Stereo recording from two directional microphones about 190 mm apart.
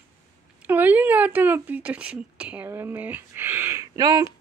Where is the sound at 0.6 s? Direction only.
10° right (ahead or behind).